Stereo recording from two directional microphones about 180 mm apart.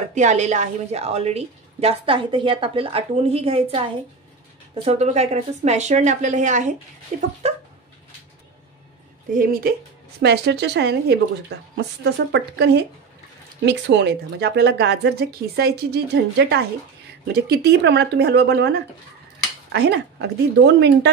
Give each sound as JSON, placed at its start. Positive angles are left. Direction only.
{"t": 0.1, "sound": "a woman's voice", "side_deg": -40}
{"t": 7.1, "sound": "a sound", "side_deg": -45}
{"t": 9.3, "sound": "speech", "side_deg": -55}
{"t": 10.2, "sound": "speech", "side_deg": -65}